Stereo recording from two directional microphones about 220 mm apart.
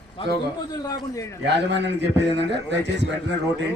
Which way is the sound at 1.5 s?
50° right (ahead or behind).